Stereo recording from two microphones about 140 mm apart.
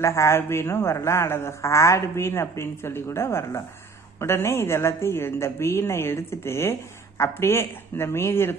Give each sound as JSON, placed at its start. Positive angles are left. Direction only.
{"t": 0.0, "sound": "a man's voice", "side_deg": 20}